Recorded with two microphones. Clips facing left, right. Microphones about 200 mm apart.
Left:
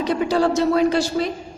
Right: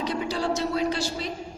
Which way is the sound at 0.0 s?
55° left (ahead or behind).